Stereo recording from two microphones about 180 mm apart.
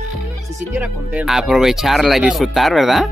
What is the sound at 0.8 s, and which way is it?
Speech, 5° right (ahead or behind).